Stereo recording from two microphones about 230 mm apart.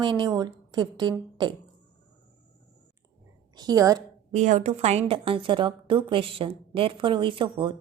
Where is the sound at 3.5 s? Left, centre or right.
Centre.